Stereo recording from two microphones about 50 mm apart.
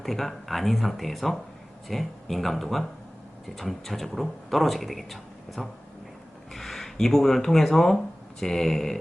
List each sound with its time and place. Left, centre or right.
0.0 s speech: centre